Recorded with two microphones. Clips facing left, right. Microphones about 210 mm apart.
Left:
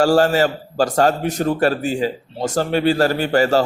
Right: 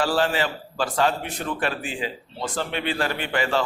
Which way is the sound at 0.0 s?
45° left (ahead or behind).